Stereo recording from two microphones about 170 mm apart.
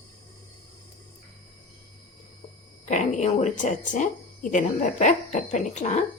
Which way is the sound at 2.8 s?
45° left (ahead or behind).